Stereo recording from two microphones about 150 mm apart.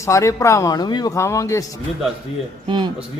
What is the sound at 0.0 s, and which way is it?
A man's voice, 20° left (ahead or behind).